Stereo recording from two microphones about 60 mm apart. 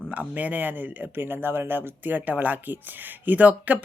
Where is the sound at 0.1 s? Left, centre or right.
Right.